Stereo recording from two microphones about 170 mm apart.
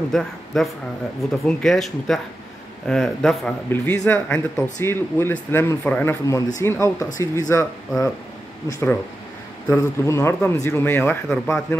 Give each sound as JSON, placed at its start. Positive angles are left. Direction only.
{"t": 0.1, "sound": "a man's voice", "side_deg": 5}
{"t": 8.6, "sound": "speech", "side_deg": 15}